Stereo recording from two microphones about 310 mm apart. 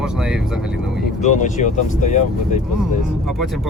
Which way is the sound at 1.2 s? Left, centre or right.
Left.